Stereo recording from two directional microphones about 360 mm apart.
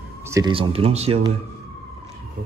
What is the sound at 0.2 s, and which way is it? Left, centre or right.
Speech, centre.